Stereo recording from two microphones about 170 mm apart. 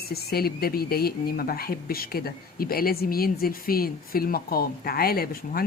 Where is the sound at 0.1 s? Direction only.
65° left (ahead or behind).